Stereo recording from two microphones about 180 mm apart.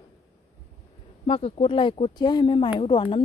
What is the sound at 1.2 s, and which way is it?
Speech, 30° left (ahead or behind).